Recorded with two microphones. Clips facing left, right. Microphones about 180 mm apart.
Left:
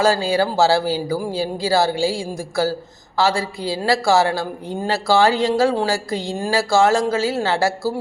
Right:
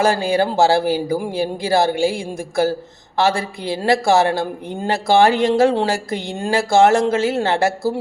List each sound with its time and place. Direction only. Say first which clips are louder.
0.0 s speech: right 1 dB; 20° right (ahead or behind)